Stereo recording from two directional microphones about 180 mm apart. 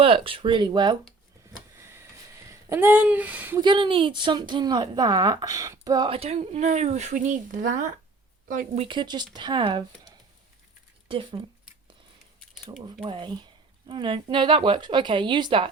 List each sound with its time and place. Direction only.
0.0 s speech: 30° right (ahead or behind)
1.7 s a sound: 15° right (ahead or behind)
2.5 s speech: 15° right (ahead or behind)
3.6 s speech: 25° right (ahead or behind); by 8.8 s 45° right (ahead or behind)
8.8 s speech: 25° right (ahead or behind)
11.1 s speech: 30° right (ahead or behind)
12.9 s speech: 30° right (ahead or behind)